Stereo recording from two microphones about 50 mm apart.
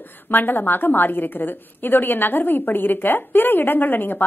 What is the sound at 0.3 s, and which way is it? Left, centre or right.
A woman's voice, left.